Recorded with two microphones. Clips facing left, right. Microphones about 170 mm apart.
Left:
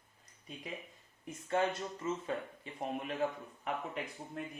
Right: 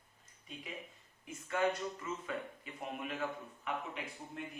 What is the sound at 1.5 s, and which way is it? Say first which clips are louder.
A man's voice: left 1 dB; 30° left (ahead or behind).